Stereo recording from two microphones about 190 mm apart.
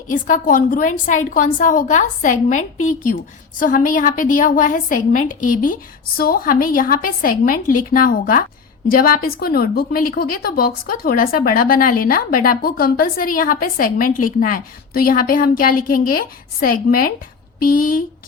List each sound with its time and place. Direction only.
0.3 s a woman's voice: 45° left (ahead or behind)